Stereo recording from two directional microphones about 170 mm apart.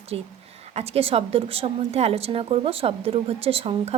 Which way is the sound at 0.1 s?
35° right (ahead or behind).